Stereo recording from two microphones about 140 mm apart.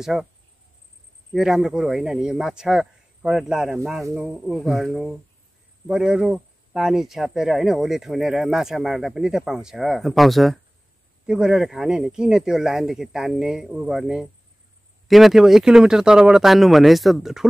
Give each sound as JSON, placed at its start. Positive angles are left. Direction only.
{"t": 0.0, "sound": "speech", "side_deg": -5}
{"t": 1.3, "sound": "speech", "side_deg": -5}
{"t": 4.3, "sound": "speech", "side_deg": 0}